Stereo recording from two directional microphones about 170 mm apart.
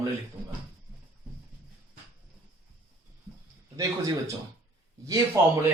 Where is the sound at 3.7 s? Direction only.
20° right (ahead or behind).